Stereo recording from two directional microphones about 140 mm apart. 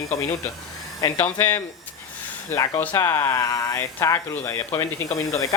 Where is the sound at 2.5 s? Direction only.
25° left (ahead or behind).